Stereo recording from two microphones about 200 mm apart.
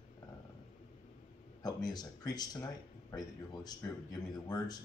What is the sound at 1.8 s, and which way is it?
A man's voice, 20° left (ahead or behind).